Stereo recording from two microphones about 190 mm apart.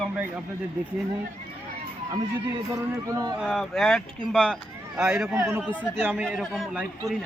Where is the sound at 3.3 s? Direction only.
Centre (ahead or behind).